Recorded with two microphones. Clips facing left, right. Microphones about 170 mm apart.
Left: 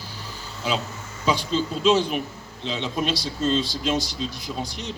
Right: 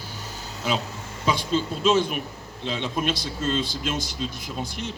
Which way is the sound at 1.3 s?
50° right (ahead or behind).